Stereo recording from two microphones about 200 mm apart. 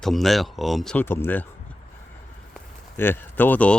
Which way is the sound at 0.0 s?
Centre (ahead or behind).